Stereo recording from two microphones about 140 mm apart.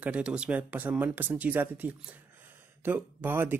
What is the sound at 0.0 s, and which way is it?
Speech, 10° right (ahead or behind).